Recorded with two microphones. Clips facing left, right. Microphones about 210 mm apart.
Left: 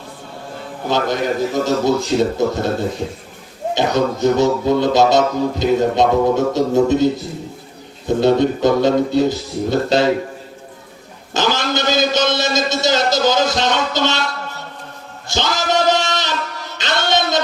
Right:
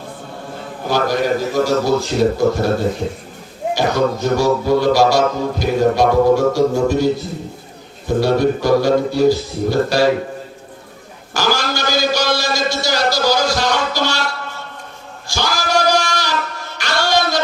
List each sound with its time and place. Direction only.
0.9 s speech: 20° left (ahead or behind)
3.8 s speech: 20° left (ahead or behind)
11.3 s a man's voice: 20° left (ahead or behind)
15.3 s a sound: 20° left (ahead or behind)
16.7 s music: 20° left (ahead or behind)